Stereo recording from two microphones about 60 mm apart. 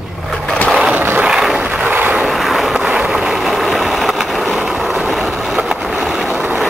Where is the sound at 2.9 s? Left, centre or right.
Centre.